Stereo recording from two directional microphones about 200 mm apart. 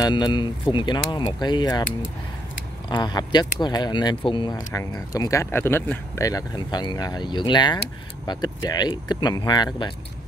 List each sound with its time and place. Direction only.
0.0 s speech: 20° left (ahead or behind)
2.9 s speech: 20° left (ahead or behind)